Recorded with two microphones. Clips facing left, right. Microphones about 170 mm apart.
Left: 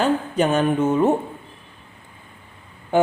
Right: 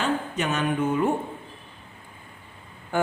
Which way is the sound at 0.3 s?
30° left (ahead or behind).